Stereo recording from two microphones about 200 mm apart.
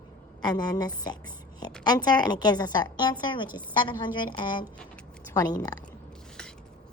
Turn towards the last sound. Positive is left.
turn(degrees=20)  # may be behind; listen again after turning